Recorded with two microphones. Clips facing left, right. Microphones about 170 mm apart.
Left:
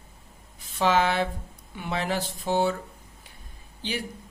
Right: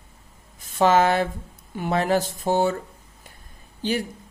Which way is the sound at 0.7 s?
45° right (ahead or behind).